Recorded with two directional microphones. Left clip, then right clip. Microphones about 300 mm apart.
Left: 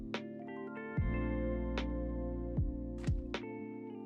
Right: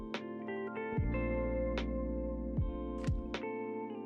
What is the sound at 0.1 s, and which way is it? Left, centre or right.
Music, centre.